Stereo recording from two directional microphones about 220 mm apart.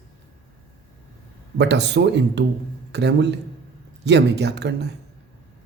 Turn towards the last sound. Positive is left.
turn(degrees=-50)  # may be behind; listen again after turning